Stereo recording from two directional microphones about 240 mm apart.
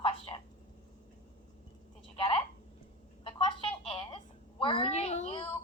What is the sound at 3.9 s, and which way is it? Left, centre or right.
Telephone, left.